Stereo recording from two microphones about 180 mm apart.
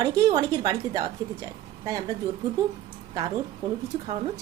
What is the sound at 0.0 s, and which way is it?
A woman's voice, 20° right (ahead or behind).